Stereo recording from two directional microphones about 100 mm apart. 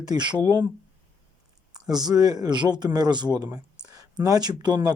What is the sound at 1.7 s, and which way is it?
Speech, 40° right (ahead or behind).